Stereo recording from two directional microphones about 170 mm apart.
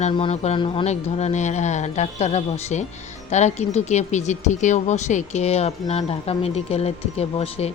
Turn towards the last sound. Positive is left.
turn(degrees=40)  # may be behind; listen again after turning